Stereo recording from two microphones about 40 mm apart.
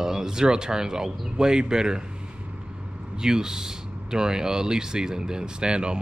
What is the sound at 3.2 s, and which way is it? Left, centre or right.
Speech, centre.